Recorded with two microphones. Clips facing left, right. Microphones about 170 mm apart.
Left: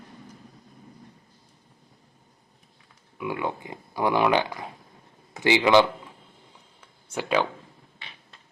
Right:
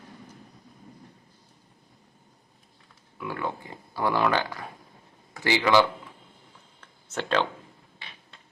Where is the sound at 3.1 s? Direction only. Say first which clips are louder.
Left 3 dB; 15° left (ahead or behind).